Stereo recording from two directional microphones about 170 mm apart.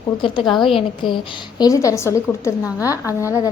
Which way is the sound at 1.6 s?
20° left (ahead or behind).